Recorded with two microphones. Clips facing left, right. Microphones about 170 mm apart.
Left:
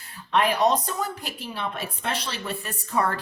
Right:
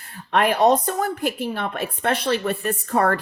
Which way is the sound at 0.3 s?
55° right (ahead or behind).